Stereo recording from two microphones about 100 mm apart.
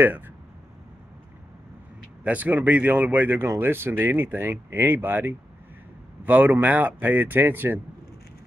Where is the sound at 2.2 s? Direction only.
15° right (ahead or behind).